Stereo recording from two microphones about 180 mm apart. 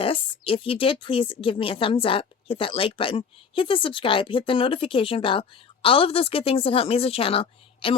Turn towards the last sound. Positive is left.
turn(degrees=30)  # may be behind; listen again after turning